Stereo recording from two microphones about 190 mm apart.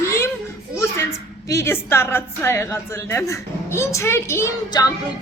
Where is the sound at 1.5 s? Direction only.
15° left (ahead or behind).